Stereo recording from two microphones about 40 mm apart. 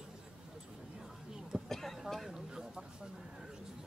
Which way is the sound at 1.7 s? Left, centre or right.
Centre.